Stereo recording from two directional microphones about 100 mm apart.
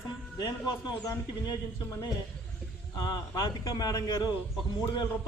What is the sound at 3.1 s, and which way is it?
A man's voice, 40° left (ahead or behind).